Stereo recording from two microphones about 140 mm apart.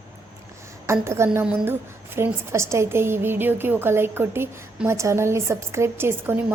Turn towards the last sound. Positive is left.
turn(degrees=-15)  # may be behind; listen again after turning